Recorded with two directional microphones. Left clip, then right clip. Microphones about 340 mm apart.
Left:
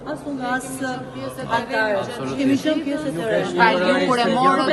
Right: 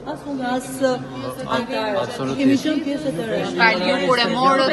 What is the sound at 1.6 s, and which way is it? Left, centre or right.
Speech, centre.